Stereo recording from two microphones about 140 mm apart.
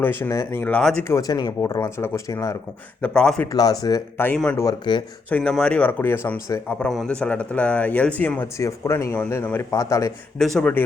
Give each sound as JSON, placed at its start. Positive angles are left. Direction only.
{"t": 0.0, "sound": "speech", "side_deg": 15}
{"t": 1.0, "sound": "speech", "side_deg": 25}
{"t": 3.0, "sound": "speech", "side_deg": 5}
{"t": 3.5, "sound": "speech", "side_deg": 30}
{"t": 5.3, "sound": "speech", "side_deg": 5}
{"t": 10.3, "sound": "speech", "side_deg": 5}